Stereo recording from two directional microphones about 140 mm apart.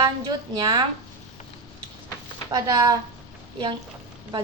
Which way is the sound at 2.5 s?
25° right (ahead or behind).